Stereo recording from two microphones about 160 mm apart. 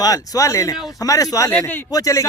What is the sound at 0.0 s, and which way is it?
Speech, 20° left (ahead or behind).